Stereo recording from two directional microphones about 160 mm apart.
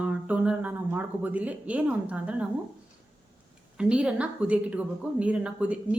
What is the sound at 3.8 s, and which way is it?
Speech, 5° right (ahead or behind).